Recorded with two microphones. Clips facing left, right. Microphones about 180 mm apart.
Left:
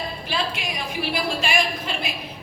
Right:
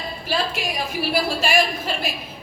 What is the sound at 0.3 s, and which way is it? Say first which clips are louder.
A woman's voice: right 5 dB; 45° right (ahead or behind).